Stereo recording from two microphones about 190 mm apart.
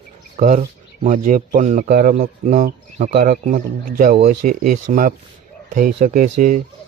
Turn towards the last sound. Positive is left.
turn(degrees=-45)  # may be behind; listen again after turning